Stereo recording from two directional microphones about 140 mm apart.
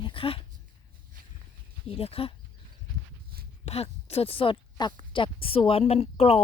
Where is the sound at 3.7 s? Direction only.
50° left (ahead or behind).